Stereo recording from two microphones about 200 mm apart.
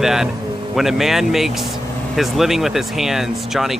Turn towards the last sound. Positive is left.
turn(degrees=0)  # may be behind; listen again after turning